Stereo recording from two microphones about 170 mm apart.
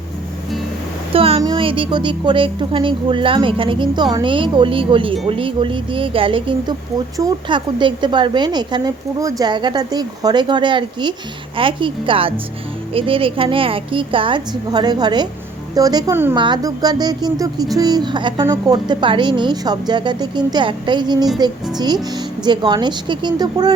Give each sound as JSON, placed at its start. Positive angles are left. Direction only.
{"t": 1.1, "sound": "a sound", "side_deg": -35}
{"t": 1.4, "sound": "a woman's voice", "side_deg": -25}
{"t": 18.4, "sound": "a woman's voice", "side_deg": -15}
{"t": 18.9, "sound": "a woman's voice", "side_deg": -30}